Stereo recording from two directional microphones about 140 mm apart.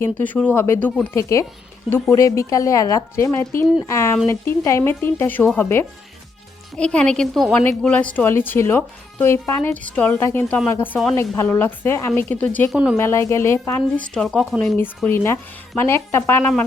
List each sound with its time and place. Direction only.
0.0 s speech: 10° left (ahead or behind)
12.7 s speech: 5° right (ahead or behind)
13.0 s speech: 20° left (ahead or behind)
14.8 s speech: 15° left (ahead or behind)